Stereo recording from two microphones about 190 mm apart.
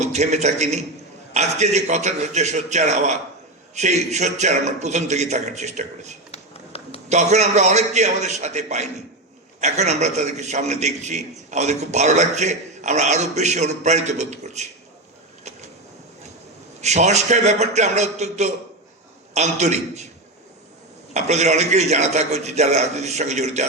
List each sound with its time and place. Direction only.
0.0 s a man's voice: 35° right (ahead or behind)
6.3 s a sound: 30° left (ahead or behind)
7.1 s a man's voice: 35° right (ahead or behind)
16.8 s a man's voice: 35° right (ahead or behind)
21.1 s a man's voice: 35° right (ahead or behind)